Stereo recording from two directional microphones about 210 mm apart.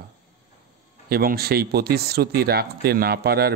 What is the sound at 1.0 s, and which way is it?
Speech, 45° right (ahead or behind).